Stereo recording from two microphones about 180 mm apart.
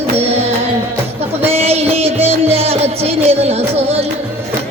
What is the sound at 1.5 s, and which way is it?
Music, 35° right (ahead or behind).